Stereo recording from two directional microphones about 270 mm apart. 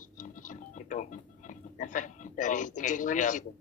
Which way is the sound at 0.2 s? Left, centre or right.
Left.